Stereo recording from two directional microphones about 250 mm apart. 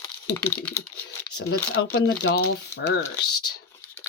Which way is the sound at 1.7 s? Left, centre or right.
Left.